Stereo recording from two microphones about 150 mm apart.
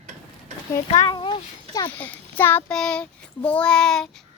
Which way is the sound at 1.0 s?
35° left (ahead or behind).